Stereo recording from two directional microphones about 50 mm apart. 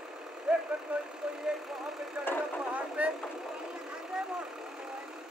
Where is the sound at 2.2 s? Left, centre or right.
Centre.